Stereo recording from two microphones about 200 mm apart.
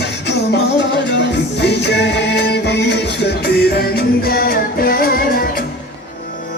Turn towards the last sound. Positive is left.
turn(degrees=45)  # may be behind; listen again after turning